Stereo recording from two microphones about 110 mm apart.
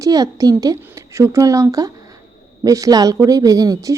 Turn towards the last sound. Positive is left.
turn(degrees=-35)  # may be behind; listen again after turning